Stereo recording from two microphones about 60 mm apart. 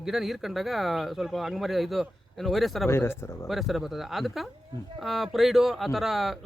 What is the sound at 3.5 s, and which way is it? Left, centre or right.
Speech, centre.